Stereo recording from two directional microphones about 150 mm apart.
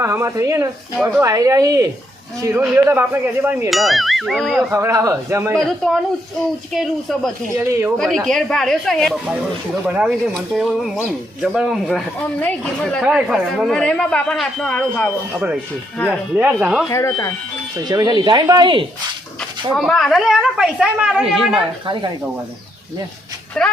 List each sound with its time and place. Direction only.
0.0 s speech: 20° right (ahead or behind)
3.7 s speech: centre (ahead or behind)
4.7 s speech: 15° right (ahead or behind)
5.5 s speech: centre (ahead or behind)
7.6 s speech: 15° right (ahead or behind)
7.9 s speech: 5° left (ahead or behind)
16.0 s speech: 10° right (ahead or behind)
16.9 s speech: 20° left (ahead or behind)
17.7 s speech: 25° right (ahead or behind)
19.7 s speech: centre (ahead or behind)
23.6 s speech: 5° left (ahead or behind)